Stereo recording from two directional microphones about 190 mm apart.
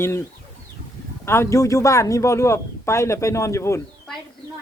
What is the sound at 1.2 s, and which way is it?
Speech, 15° left (ahead or behind).